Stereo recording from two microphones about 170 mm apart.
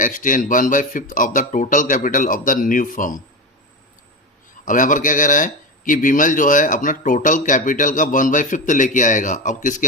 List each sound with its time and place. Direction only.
0.0 s speech: 50° left (ahead or behind)
4.6 s speech: 50° left (ahead or behind)